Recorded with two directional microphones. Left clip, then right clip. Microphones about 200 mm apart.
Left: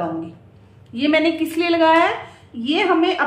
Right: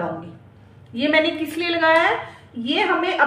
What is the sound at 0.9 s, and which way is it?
A woman's voice, 35° left (ahead or behind).